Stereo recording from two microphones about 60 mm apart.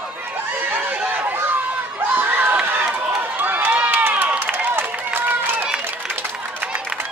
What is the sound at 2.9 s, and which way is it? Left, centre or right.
Run, right.